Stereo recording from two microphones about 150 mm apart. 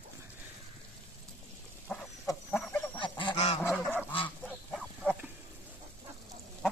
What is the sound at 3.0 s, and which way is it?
Goose, 30° left (ahead or behind).